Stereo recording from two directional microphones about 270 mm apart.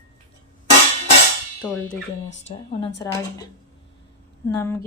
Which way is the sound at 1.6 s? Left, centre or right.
Centre.